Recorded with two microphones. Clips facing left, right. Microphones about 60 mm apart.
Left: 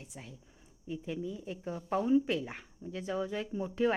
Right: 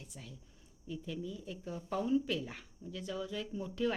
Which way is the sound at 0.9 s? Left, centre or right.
Left.